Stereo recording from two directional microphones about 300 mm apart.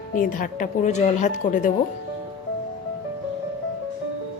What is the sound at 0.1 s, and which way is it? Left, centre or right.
Speech, left.